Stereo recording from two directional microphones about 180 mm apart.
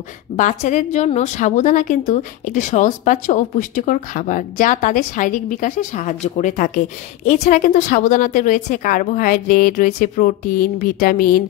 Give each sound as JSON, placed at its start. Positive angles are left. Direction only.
{"t": 0.4, "sound": "a woman's voice", "side_deg": 40}